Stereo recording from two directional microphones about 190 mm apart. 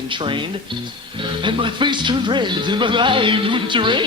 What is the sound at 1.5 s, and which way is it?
Speech, 25° right (ahead or behind).